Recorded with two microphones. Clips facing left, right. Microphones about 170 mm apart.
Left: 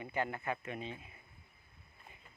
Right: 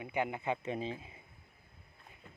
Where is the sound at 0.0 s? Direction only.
15° right (ahead or behind); by 0.9 s 30° right (ahead or behind).